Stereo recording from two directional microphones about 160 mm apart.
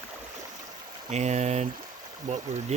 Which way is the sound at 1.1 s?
45° right (ahead or behind).